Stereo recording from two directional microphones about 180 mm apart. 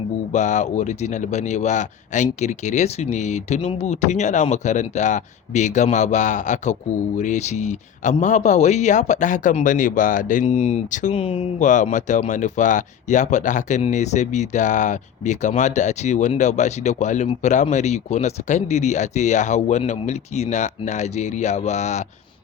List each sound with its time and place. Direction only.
0.3 s speech: 40° left (ahead or behind)
11.2 s speech: 30° left (ahead or behind)
11.6 s speech: 45° left (ahead or behind)